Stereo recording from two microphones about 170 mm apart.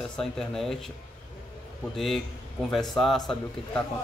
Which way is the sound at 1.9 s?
Centre (ahead or behind).